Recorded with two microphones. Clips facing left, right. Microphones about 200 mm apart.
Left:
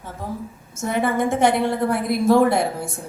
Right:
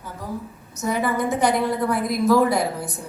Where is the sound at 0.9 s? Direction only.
25° left (ahead or behind).